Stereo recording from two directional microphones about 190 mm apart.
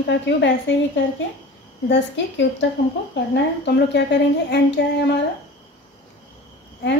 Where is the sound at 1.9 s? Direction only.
70° left (ahead or behind).